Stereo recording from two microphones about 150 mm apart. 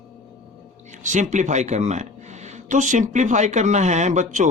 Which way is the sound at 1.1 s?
55° right (ahead or behind).